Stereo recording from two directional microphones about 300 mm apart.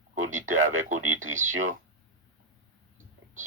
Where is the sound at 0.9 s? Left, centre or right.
Right.